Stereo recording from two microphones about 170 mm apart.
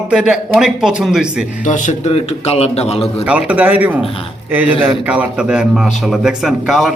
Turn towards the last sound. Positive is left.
turn(degrees=0)  # may be behind; listen again after turning